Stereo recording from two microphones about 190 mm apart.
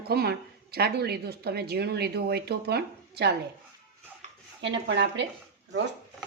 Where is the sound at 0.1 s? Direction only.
55° right (ahead or behind).